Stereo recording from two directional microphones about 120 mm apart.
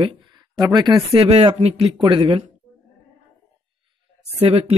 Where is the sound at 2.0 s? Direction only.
50° right (ahead or behind).